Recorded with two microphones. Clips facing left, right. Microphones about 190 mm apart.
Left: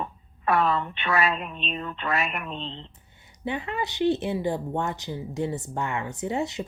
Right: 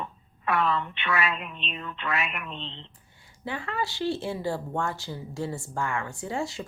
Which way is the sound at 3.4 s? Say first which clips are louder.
Left 2 dB; 20° left (ahead or behind).